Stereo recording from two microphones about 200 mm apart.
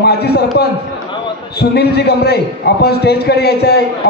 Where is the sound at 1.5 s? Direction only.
55° left (ahead or behind).